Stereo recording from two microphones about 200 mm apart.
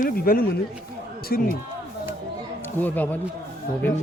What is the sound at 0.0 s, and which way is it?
Speech, 45° left (ahead or behind).